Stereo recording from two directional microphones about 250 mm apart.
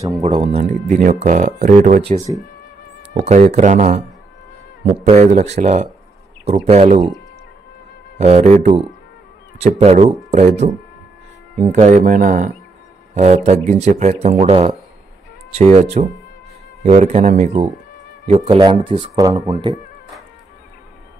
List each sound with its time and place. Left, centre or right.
0.2 s speech: right
2.1 s speech: centre
3.2 s speech: right
5.0 s speech: right
8.2 s speech: right